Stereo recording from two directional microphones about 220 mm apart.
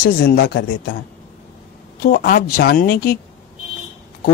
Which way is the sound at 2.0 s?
45° left (ahead or behind).